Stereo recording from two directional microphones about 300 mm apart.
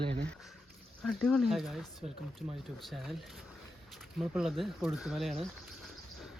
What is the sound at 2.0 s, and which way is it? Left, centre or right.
Speech, right.